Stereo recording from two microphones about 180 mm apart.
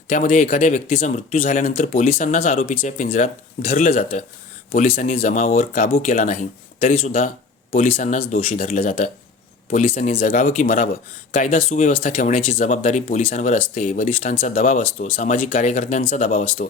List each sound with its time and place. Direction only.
0.1 s speech: 45° left (ahead or behind)
7.9 s speech: 40° left (ahead or behind)
8.5 s speech: 45° left (ahead or behind)